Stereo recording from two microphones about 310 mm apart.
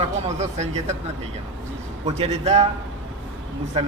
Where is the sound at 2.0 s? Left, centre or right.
Right.